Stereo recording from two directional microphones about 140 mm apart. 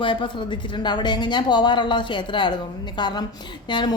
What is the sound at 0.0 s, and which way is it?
Speech, 35° left (ahead or behind).